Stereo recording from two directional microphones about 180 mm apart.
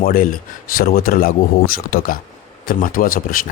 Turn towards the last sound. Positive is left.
turn(degrees=50)  # may be behind; listen again after turning